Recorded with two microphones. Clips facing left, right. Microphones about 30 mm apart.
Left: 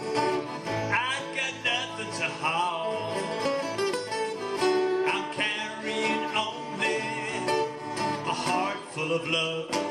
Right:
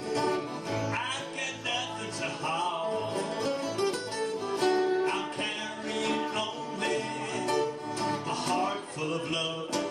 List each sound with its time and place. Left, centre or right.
0.2 s music: left
1.0 s music: left
6.3 s music: left